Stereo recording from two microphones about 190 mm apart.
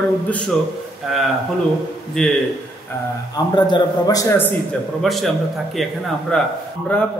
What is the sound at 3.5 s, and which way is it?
Speech, 25° left (ahead or behind).